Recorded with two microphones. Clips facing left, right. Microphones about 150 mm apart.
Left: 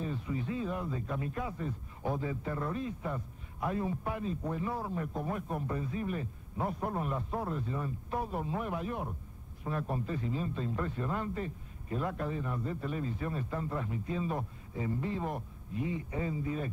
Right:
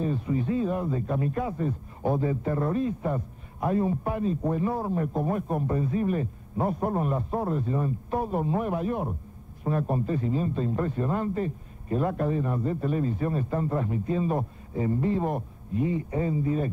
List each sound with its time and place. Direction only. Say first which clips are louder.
0.0 s a man's voice: right 9 dB; 50° right (ahead or behind)